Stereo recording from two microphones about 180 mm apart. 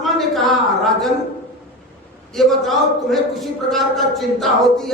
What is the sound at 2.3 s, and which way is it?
Speech, centre (ahead or behind).